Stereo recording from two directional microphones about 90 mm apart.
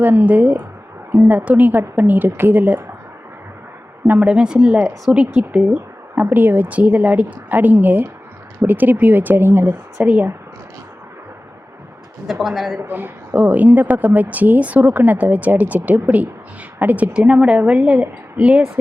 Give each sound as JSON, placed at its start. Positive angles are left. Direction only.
{"t": 0.0, "sound": "a woman's voice", "side_deg": -20}
{"t": 4.1, "sound": "a woman's voice", "side_deg": -15}
{"t": 6.3, "sound": "a woman's voice", "side_deg": -20}
{"t": 12.3, "sound": "speech", "side_deg": 0}
{"t": 12.8, "sound": "a woman's voice", "side_deg": -20}